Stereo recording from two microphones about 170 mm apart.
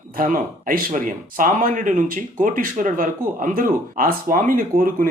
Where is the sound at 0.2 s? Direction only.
55° right (ahead or behind).